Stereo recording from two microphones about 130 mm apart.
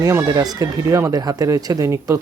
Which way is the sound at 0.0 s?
25° right (ahead or behind).